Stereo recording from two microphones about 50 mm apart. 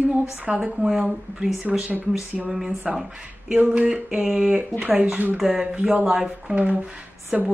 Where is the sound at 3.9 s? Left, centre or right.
Centre.